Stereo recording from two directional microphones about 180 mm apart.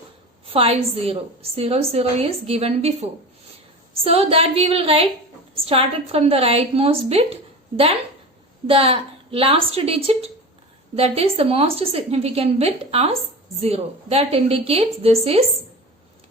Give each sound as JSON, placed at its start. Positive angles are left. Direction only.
{"t": 0.4, "sound": "a woman's voice", "side_deg": -30}
{"t": 8.6, "sound": "a woman's voice", "side_deg": -30}